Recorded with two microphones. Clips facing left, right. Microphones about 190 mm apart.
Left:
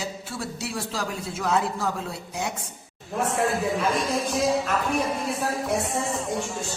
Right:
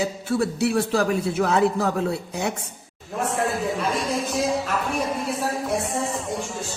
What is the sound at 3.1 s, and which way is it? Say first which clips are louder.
A man's voice: even; centre (ahead or behind).